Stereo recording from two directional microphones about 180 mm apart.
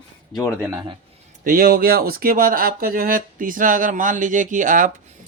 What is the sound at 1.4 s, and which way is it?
Speech, 50° right (ahead or behind).